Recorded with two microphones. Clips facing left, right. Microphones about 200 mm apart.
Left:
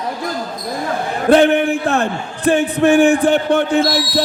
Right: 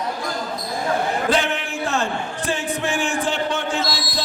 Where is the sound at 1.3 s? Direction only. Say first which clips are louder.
Left 11 dB; 55° left (ahead or behind).